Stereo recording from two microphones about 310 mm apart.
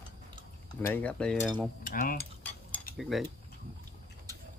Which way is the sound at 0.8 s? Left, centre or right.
Centre.